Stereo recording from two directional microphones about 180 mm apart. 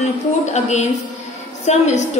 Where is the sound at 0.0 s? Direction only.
40° left (ahead or behind).